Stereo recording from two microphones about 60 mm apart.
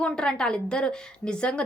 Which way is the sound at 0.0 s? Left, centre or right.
Centre.